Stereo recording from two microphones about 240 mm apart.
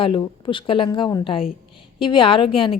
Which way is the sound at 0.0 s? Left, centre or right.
Left.